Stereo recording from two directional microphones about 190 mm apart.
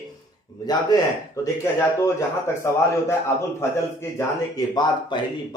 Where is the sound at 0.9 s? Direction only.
20° left (ahead or behind).